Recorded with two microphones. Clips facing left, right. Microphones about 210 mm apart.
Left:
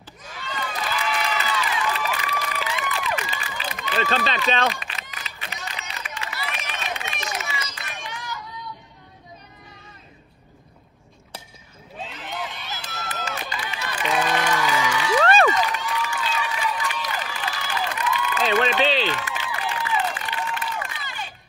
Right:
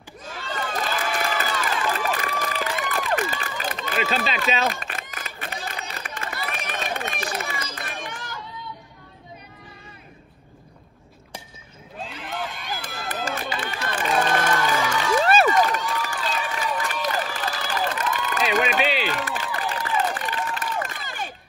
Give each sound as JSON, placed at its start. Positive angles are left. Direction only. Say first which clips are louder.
{"t": 0.2, "sound": "crowd", "louder": "right 2 dB", "side_deg": -45}
{"t": 4.0, "sound": "speech", "louder": "left 1 dB", "side_deg": -5}
{"t": 4.6, "sound": "a sound", "louder": "even", "side_deg": -50}
{"t": 5.7, "sound": "run", "louder": "right 2 dB", "side_deg": -55}
{"t": 12.0, "sound": "run", "louder": "right 1 dB", "side_deg": 0}
{"t": 13.2, "sound": "a sound", "louder": "right 4 dB", "side_deg": -50}
{"t": 15.5, "sound": "run", "louder": "right 3 dB", "side_deg": -50}
{"t": 18.8, "sound": "a sound", "louder": "left 2 dB", "side_deg": -10}
{"t": 19.0, "sound": "crowd", "louder": "right 1 dB", "side_deg": -40}